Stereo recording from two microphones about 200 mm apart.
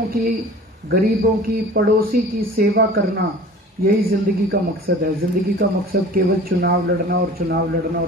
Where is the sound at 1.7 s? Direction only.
45° right (ahead or behind).